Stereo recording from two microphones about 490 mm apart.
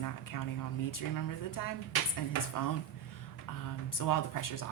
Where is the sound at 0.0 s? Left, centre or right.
Left.